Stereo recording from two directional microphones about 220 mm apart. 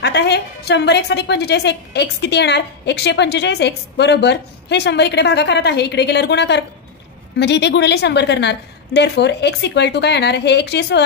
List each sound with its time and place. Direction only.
0.0 s a woman's voice: 50° left (ahead or behind)